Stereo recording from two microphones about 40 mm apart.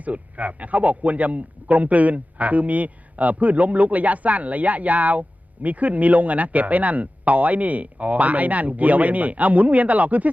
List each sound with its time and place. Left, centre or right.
0.0 s a man's voice: right